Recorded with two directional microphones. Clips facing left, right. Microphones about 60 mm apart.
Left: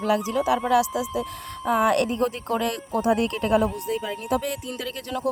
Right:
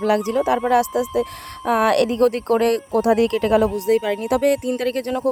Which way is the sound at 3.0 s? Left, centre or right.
Right.